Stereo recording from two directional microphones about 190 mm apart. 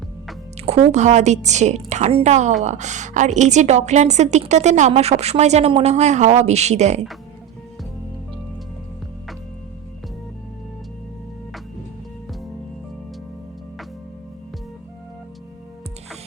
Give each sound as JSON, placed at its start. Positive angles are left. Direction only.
{"t": 0.9, "sound": "a woman's voice", "side_deg": -35}